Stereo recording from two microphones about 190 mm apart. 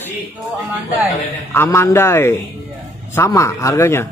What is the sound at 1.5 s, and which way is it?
Speech, 15° left (ahead or behind).